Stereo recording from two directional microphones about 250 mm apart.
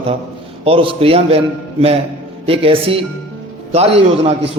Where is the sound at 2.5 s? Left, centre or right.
Right.